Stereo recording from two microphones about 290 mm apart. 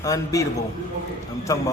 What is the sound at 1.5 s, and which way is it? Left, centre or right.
Speech, centre.